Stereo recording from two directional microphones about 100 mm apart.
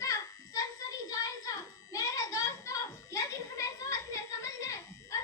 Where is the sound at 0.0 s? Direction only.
30° left (ahead or behind).